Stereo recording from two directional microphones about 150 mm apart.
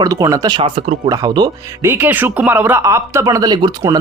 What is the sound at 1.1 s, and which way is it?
Speech, 25° right (ahead or behind).